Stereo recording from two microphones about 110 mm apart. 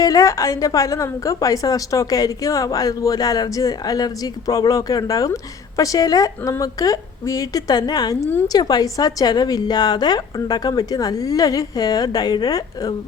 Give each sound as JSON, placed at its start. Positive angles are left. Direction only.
{"t": 0.0, "sound": "a woman's voice", "side_deg": 30}